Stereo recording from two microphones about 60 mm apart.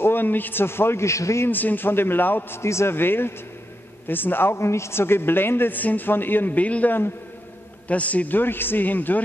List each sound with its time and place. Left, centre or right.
0.0 s a man's voice: left
1.5 s a man's voice: left
2.6 s a man's voice: left
4.6 s a man's voice: left